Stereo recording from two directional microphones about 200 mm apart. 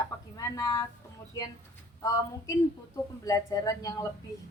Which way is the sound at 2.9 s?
15° left (ahead or behind).